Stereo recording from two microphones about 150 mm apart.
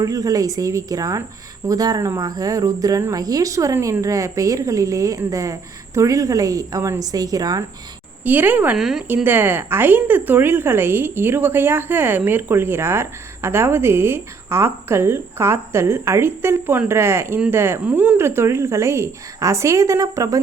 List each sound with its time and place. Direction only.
0.0 s speech: 25° right (ahead or behind)
8.2 s a woman's voice: 10° right (ahead or behind)
9.0 s a woman's voice: 15° right (ahead or behind)